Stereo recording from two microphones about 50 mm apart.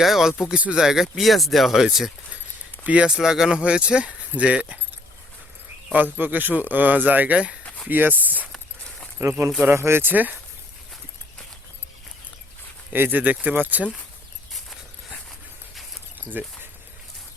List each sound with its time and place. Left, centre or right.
0.0 s speech: centre
2.8 s speech: right
3.1 s speech: centre
5.9 s speech: right
9.2 s speech: right
9.7 s speech: right
10.1 s speech: right
12.9 s speech: right
16.4 s speech: right